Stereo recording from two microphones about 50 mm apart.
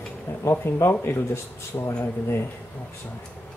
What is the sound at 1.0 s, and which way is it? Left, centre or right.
Speech, left.